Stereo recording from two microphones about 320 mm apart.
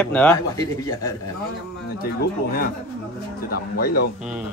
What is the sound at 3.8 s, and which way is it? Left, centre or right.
Speech, left.